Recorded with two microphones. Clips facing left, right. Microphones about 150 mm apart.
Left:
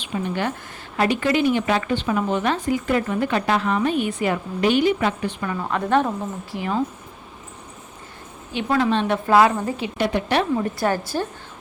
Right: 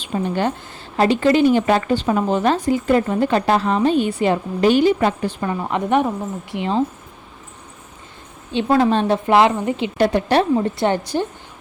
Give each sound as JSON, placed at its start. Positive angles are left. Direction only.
{"t": 0.0, "sound": "speech", "side_deg": -35}
{"t": 5.5, "sound": "a woman's voice", "side_deg": -20}
{"t": 8.5, "sound": "speech", "side_deg": -35}
{"t": 9.1, "sound": "a woman's voice", "side_deg": -25}
{"t": 10.0, "sound": "speech", "side_deg": -40}
{"t": 10.5, "sound": "a woman's voice", "side_deg": -25}